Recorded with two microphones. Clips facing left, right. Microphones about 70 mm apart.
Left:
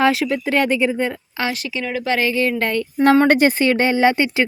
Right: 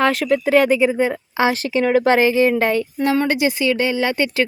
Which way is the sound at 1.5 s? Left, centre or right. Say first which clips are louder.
Right 8 dB; right.